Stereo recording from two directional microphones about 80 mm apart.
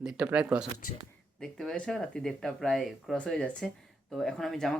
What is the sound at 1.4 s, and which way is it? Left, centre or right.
Speech, centre.